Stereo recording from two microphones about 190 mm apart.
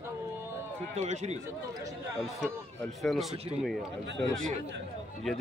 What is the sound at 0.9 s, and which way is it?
Speech, 35° right (ahead or behind).